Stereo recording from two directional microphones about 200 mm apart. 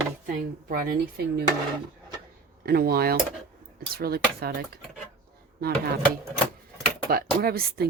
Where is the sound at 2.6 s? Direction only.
50° right (ahead or behind).